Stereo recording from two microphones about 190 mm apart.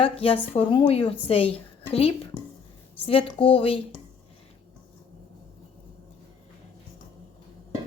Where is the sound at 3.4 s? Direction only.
30° left (ahead or behind).